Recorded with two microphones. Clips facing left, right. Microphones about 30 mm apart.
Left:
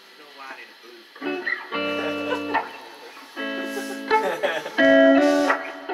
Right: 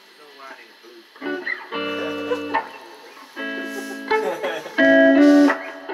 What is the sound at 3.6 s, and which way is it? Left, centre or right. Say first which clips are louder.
Music: even; left.